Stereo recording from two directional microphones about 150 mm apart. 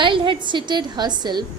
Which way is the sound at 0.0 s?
35° right (ahead or behind).